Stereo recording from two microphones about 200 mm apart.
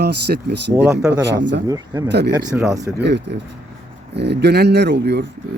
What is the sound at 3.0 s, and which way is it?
Speech, 60° right (ahead or behind).